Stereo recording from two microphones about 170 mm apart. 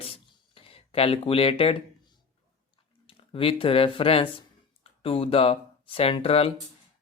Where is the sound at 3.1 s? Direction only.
35° left (ahead or behind).